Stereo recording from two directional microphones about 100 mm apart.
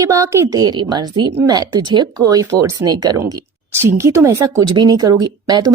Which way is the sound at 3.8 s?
25° right (ahead or behind).